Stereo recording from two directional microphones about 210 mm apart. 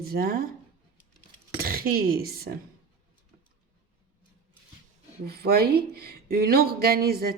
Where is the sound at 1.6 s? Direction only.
45° right (ahead or behind).